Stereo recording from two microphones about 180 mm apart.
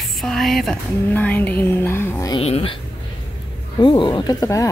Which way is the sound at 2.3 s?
35° left (ahead or behind).